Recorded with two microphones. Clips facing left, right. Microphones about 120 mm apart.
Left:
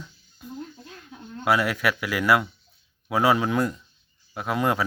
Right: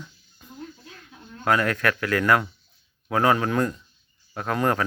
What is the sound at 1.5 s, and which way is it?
Speech, 10° left (ahead or behind).